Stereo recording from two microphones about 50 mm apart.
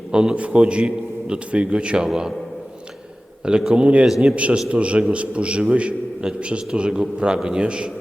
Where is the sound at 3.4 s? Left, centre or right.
Centre.